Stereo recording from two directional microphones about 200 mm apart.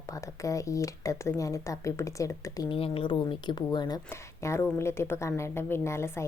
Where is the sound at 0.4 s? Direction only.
15° left (ahead or behind).